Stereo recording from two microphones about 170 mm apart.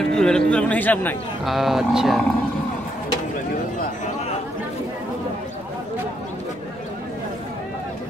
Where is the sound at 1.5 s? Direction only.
Centre (ahead or behind).